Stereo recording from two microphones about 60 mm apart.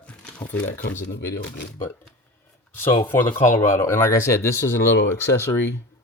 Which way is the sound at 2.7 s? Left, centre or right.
Left.